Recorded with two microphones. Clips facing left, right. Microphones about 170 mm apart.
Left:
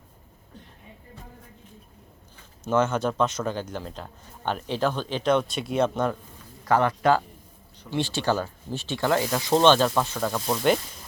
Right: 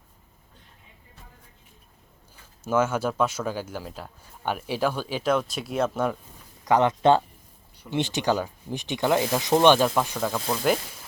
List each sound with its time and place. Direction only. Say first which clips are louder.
2.6 s a man's voice: left 1 dB; 5° right (ahead or behind)
6.7 s a man's voice: right 2 dB; 20° right (ahead or behind); by 10.8 s centre (ahead or behind)